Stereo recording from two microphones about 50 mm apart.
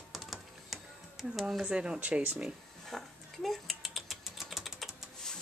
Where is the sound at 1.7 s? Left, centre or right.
Centre.